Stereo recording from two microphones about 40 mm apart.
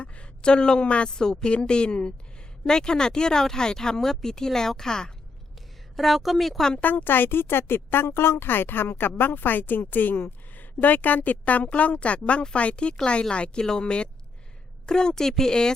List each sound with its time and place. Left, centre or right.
0.0 s a woman's voice: left
6.0 s a woman's voice: centre
6.6 s speech: centre
6.8 s speech: left
13.6 s speech: centre